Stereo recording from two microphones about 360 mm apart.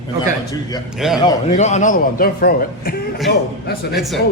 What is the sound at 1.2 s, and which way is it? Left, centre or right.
A man's voice, centre.